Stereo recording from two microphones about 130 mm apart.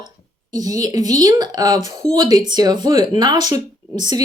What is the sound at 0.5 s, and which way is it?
A woman's voice, 30° right (ahead or behind).